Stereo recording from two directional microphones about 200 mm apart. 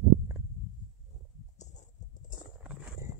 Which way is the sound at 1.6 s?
35° left (ahead or behind).